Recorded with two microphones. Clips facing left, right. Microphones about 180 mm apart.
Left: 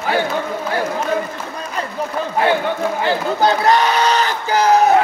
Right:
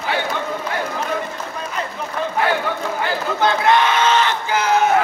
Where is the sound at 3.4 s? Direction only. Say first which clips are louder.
Left 1 dB; 40° left (ahead or behind).